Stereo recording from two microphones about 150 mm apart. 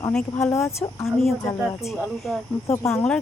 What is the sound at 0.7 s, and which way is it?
Speech, 20° left (ahead or behind).